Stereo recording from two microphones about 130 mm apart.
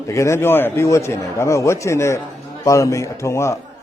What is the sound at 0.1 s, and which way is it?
Speech, 20° left (ahead or behind).